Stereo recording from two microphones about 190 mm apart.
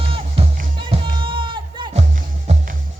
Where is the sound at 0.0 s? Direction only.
30° right (ahead or behind).